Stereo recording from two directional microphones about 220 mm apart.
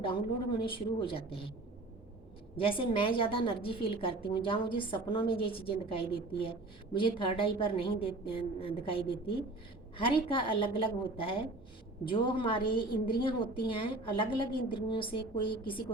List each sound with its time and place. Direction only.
0.6 s a woman's voice: 25° left (ahead or behind)
2.6 s a woman's voice: 25° left (ahead or behind)